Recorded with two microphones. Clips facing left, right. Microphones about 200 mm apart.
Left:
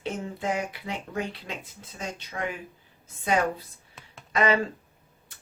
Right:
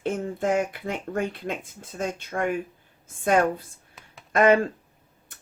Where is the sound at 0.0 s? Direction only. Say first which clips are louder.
Right 5 dB; 50° right (ahead or behind).